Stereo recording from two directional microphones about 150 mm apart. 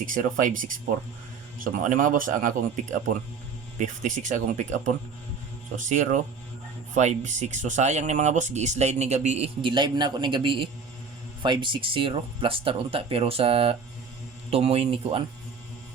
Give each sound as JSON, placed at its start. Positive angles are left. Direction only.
{"t": 0.0, "sound": "speech", "side_deg": -60}